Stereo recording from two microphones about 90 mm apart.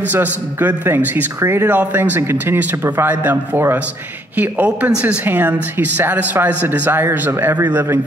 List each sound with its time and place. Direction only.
0.0 s a man's voice: 20° right (ahead or behind)